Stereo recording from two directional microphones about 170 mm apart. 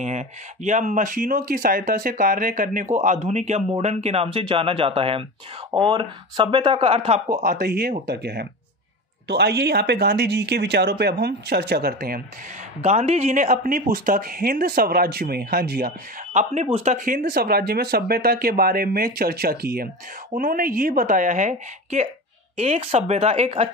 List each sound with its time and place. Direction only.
0.0 s speech: 45° right (ahead or behind)
7.4 s speech: 60° right (ahead or behind)
12.8 s speech: 45° right (ahead or behind); by 15.9 s 60° right (ahead or behind)
16.6 s speech: 40° right (ahead or behind)